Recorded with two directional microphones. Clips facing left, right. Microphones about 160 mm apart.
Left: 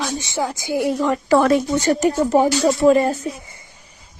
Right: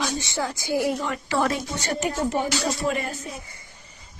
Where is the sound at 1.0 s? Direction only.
35° left (ahead or behind).